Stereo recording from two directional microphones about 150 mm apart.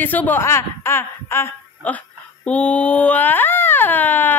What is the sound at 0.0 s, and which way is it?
Speech, 10° left (ahead or behind).